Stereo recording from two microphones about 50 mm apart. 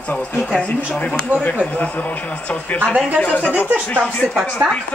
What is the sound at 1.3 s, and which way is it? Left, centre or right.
Speech, right.